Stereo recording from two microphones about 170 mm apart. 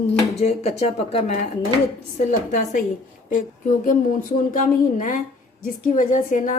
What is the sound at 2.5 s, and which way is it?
Speech, 45° left (ahead or behind).